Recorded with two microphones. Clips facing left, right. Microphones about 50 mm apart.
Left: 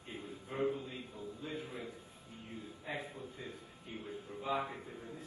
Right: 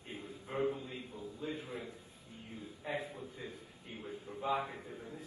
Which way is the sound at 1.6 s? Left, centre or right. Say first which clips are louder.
Right 1 dB; right.